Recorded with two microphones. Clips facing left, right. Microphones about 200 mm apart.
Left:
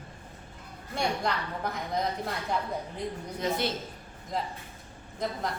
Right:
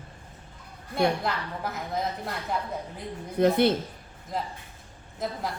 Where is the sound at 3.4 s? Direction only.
60° right (ahead or behind).